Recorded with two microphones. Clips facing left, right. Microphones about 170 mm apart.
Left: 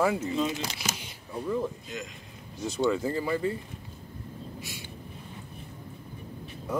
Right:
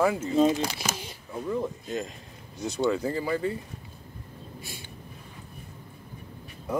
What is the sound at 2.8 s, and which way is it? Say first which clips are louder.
Speech: even; centre (ahead or behind).